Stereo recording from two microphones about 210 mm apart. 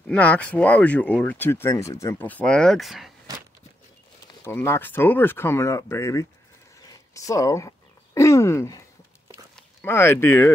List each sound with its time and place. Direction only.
0.1 s speech: 5° left (ahead or behind)
4.5 s speech: 10° left (ahead or behind)
6.9 s a sound: 15° left (ahead or behind)
9.6 s speech: 5° left (ahead or behind)